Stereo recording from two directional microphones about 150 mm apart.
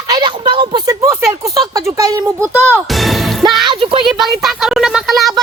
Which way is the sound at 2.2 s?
10° right (ahead or behind).